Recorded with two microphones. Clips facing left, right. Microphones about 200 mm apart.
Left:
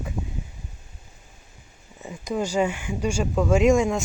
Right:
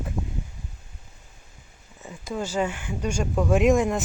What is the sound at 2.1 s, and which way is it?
Speech, 15° left (ahead or behind).